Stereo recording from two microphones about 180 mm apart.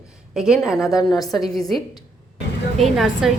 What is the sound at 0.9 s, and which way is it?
Speech, 20° left (ahead or behind).